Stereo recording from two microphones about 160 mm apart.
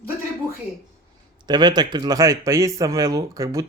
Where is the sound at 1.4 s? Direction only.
25° right (ahead or behind).